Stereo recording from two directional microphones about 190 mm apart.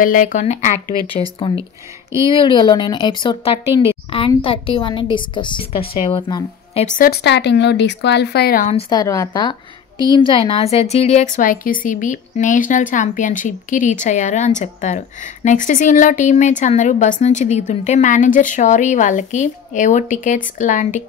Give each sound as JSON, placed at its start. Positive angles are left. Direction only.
{"t": 0.0, "sound": "speech", "side_deg": 45}
{"t": 2.2, "sound": "speech", "side_deg": 25}
{"t": 7.0, "sound": "speech", "side_deg": 60}
{"t": 8.7, "sound": "speech", "side_deg": 25}
{"t": 11.3, "sound": "speech", "side_deg": 45}